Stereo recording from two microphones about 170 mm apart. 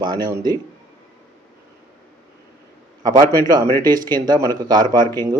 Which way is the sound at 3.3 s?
25° right (ahead or behind).